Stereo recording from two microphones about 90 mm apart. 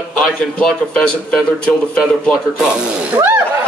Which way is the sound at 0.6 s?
10° left (ahead or behind).